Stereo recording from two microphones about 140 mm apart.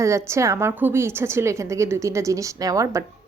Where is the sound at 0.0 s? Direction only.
20° right (ahead or behind).